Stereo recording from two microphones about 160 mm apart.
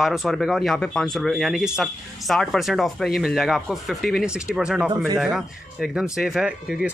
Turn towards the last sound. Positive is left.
turn(degrees=-5)  # may be behind; listen again after turning